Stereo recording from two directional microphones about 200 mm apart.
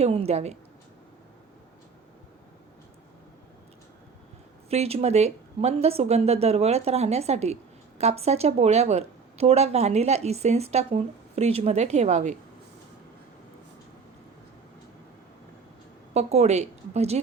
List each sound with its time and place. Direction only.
0.0 s speech: 30° right (ahead or behind)
4.7 s speech: 30° right (ahead or behind)
16.1 s speech: 35° right (ahead or behind)